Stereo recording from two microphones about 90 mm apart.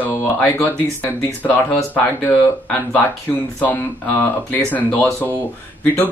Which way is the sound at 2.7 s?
20° left (ahead or behind).